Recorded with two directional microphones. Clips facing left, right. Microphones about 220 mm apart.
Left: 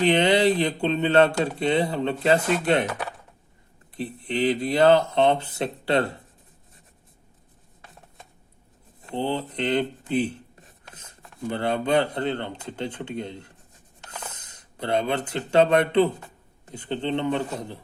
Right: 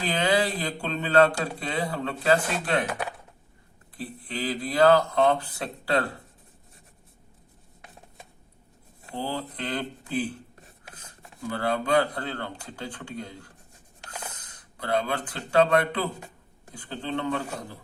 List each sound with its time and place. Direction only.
0.0 s speech: 25° left (ahead or behind)
3.9 s speech: 25° left (ahead or behind)
9.1 s speech: 25° left (ahead or behind)